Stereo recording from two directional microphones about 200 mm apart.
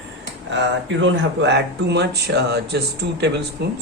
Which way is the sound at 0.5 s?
65° right (ahead or behind).